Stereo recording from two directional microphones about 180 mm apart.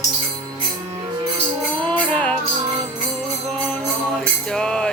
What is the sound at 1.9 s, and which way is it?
Music, 5° left (ahead or behind).